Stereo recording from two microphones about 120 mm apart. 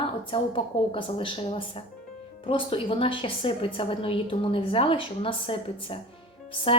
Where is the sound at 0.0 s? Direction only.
50° left (ahead or behind).